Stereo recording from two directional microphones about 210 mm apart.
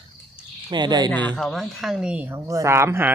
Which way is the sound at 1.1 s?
5° left (ahead or behind).